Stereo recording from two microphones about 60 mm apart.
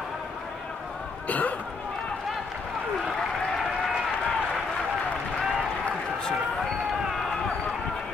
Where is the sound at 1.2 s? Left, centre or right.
Left.